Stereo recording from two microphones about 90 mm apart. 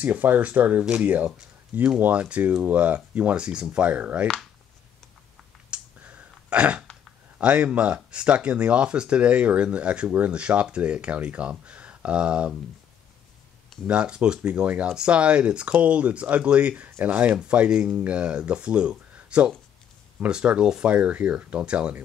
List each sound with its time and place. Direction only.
0.0 s speech: 20° right (ahead or behind)
5.7 s clicking: 15° right (ahead or behind)
7.3 s speech: 15° right (ahead or behind)
13.8 s speech: 10° right (ahead or behind)